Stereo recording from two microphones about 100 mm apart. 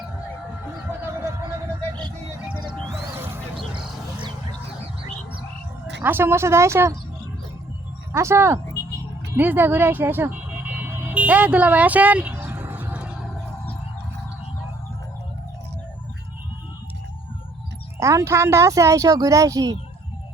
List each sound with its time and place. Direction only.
6.0 s speech: 20° right (ahead or behind)
8.1 s speech: 25° right (ahead or behind)
9.3 s car alarm: 20° right (ahead or behind)
18.0 s speech: 30° right (ahead or behind)